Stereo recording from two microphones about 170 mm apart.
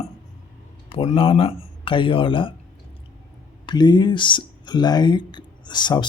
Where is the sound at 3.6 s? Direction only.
25° left (ahead or behind).